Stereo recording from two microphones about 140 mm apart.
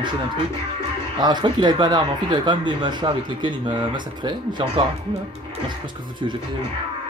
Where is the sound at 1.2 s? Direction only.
30° right (ahead or behind).